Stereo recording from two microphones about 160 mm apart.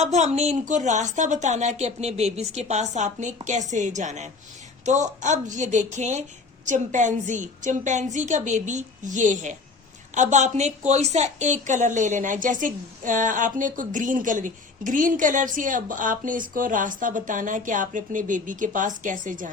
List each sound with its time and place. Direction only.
0.0 s a woman's voice: 45° right (ahead or behind)